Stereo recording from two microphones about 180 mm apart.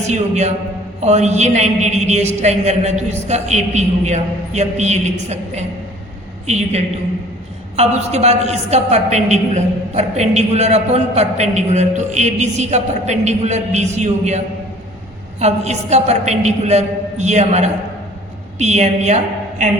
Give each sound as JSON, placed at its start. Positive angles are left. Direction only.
{"t": 0.1, "sound": "a woman's voice", "side_deg": -40}